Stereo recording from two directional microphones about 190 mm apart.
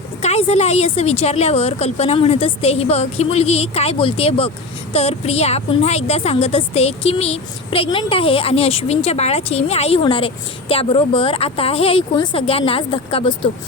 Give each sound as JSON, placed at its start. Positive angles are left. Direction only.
{"t": 0.2, "sound": "a woman's voice", "side_deg": 35}